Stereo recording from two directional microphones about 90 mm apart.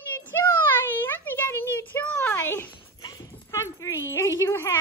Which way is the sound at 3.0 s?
35° left (ahead or behind).